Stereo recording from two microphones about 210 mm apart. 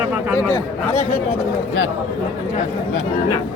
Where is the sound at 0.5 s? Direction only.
35° left (ahead or behind).